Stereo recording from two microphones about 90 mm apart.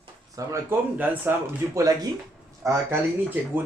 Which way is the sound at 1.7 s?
40° right (ahead or behind).